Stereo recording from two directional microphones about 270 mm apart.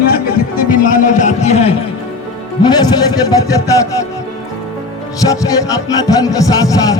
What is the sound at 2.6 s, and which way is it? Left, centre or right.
A man's voice, centre.